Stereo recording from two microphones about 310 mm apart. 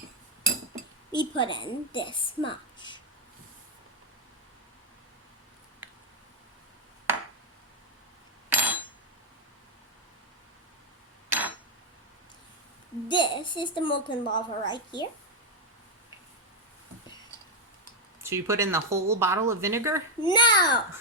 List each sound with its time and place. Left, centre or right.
1.1 s a woman's voice: centre
8.4 s a sound: centre
11.3 s a sound: centre
13.1 s a woman's voice: centre
18.2 s speech: centre
20.2 s a woman's voice: centre